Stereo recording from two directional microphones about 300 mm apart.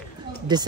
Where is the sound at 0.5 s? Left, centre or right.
Centre.